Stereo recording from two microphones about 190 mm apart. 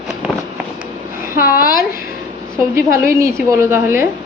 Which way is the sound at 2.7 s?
15° right (ahead or behind).